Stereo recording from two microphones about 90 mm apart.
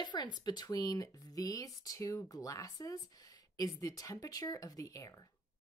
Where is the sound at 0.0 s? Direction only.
55° left (ahead or behind).